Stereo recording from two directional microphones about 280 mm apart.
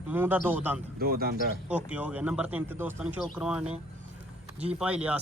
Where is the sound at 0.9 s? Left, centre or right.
Right.